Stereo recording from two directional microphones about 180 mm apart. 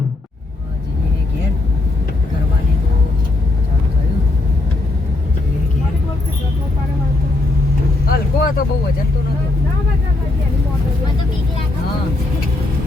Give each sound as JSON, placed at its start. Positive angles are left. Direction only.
{"t": 8.0, "sound": "vehicle", "side_deg": 55}